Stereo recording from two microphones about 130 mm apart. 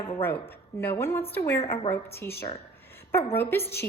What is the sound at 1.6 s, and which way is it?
Speech, 50° left (ahead or behind).